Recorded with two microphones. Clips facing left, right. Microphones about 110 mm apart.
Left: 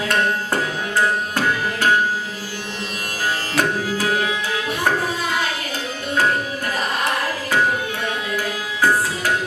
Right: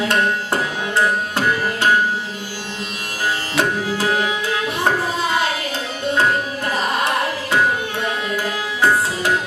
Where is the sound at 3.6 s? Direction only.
30° right (ahead or behind).